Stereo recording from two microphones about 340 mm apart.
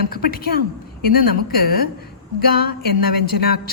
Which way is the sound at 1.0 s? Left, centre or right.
Left.